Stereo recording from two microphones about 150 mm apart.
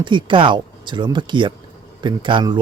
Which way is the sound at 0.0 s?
30° right (ahead or behind).